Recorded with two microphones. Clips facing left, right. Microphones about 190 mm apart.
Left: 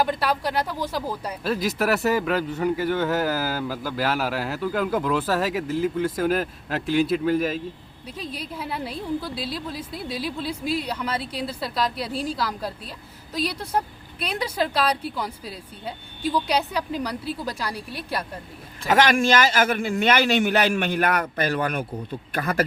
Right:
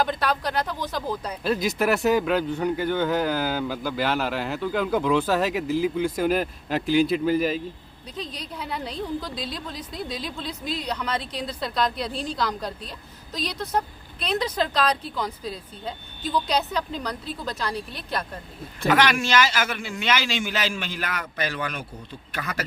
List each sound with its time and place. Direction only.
0.0 s a woman's voice: 10° left (ahead or behind)
18.9 s speech: 45° left (ahead or behind)